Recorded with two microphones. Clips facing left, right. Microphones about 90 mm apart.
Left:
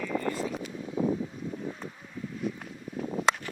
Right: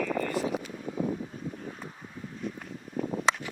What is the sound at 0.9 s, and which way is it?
Vehicle, 50° right (ahead or behind).